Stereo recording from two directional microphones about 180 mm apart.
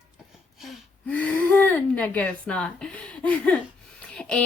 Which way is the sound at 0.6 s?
10° left (ahead or behind).